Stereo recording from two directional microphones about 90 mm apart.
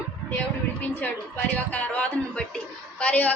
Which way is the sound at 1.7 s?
15° left (ahead or behind).